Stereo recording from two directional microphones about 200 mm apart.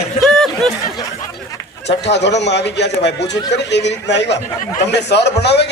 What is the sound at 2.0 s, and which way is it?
A man's voice, 60° left (ahead or behind).